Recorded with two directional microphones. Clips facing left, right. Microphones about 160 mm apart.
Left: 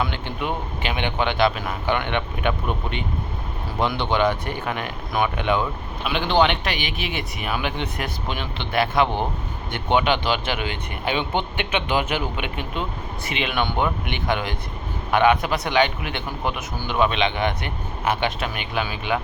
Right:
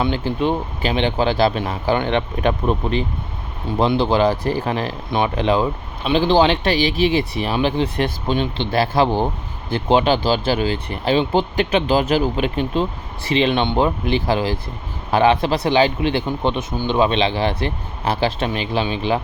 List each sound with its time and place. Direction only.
0.0 s a man's voice: 30° right (ahead or behind)